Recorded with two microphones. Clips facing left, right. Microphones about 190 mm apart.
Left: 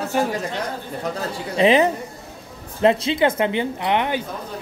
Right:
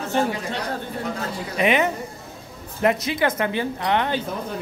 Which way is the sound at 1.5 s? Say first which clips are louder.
Left 5 dB; 30° left (ahead or behind).